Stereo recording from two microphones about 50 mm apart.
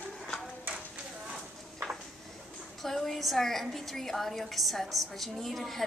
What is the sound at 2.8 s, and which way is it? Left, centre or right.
A woman's voice, centre.